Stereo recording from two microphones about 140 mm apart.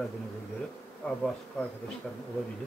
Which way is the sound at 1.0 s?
10° left (ahead or behind).